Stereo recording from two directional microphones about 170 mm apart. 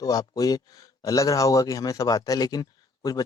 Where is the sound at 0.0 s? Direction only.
20° left (ahead or behind).